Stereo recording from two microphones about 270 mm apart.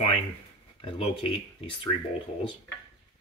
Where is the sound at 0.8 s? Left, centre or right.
Centre.